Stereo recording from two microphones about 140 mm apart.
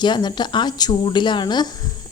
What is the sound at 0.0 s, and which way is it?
A woman's voice, 30° left (ahead or behind).